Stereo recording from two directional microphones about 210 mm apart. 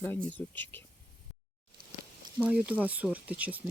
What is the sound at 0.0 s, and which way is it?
Speech, 10° left (ahead or behind).